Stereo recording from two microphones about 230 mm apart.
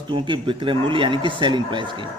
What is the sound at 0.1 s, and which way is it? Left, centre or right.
Speech, right.